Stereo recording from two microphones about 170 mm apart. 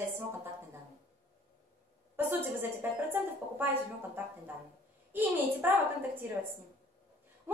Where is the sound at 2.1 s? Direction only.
10° right (ahead or behind).